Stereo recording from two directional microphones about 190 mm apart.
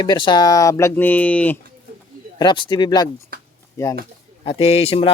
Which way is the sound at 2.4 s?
25° left (ahead or behind).